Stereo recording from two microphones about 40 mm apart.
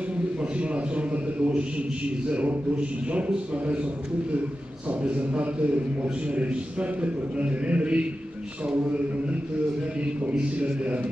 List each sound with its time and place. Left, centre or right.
0.4 s a man's voice: right
4.8 s a man's voice: right
10.6 s a man's voice: right